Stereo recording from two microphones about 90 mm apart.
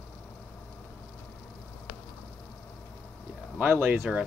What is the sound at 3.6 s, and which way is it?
Speech, 20° right (ahead or behind).